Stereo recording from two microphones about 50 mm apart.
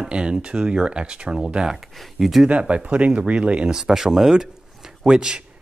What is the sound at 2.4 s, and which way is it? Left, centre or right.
Speech, right.